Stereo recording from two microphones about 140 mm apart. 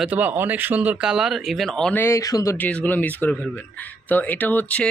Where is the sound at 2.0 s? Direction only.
20° left (ahead or behind).